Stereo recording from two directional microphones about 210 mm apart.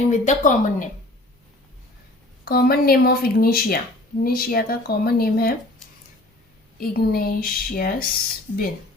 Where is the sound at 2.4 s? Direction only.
45° left (ahead or behind).